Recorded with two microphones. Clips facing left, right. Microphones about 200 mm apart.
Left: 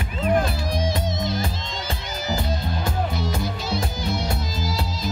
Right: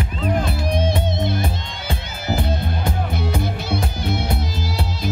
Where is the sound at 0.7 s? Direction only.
60° right (ahead or behind).